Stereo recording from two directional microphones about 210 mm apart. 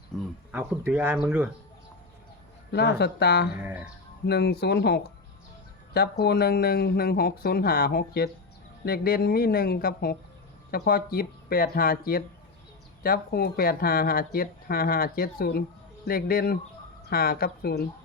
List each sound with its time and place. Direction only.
0.5 s speech: 5° right (ahead or behind)
2.7 s speech: 50° left (ahead or behind)
3.6 s speech: 10° right (ahead or behind)
4.3 s speech: 50° left (ahead or behind)